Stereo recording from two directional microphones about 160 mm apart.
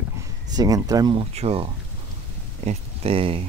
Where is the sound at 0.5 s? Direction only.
25° right (ahead or behind).